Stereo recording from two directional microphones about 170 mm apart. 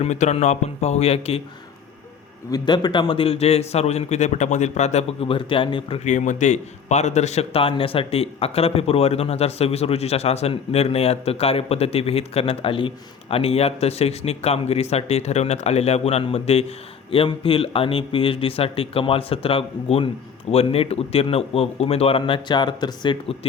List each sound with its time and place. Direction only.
0.0 s a man's voice: 40° left (ahead or behind)
2.5 s a man's voice: 25° left (ahead or behind)
6.1 s a man's voice: 45° left (ahead or behind); by 23.5 s 25° left (ahead or behind)